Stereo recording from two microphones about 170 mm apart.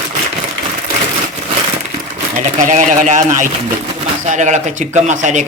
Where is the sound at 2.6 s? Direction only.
45° right (ahead or behind).